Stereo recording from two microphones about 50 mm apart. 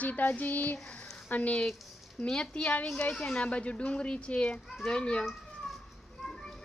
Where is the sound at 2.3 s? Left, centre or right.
Centre.